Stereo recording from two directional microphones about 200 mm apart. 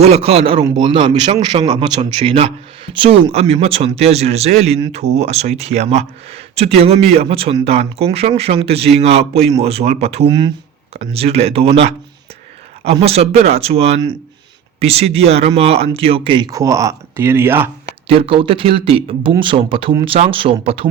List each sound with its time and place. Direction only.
0.0 s speech: 30° right (ahead or behind); by 17.7 s 10° right (ahead or behind)
18.2 s speech: 25° right (ahead or behind)